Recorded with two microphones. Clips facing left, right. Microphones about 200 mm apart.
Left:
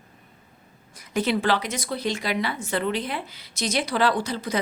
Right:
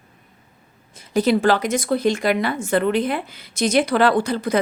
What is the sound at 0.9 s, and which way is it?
Speech, 35° right (ahead or behind).